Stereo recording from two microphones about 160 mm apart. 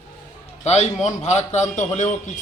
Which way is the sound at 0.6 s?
45° left (ahead or behind).